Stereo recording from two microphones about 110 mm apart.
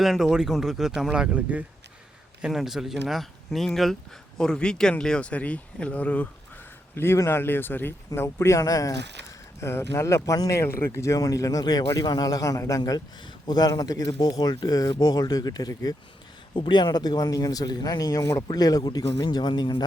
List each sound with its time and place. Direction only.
0.0 s speech: centre (ahead or behind); by 16.0 s 35° left (ahead or behind)
16.6 s speech: 50° left (ahead or behind)